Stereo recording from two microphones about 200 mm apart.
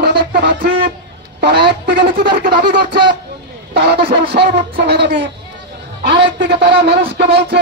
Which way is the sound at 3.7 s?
55° right (ahead or behind).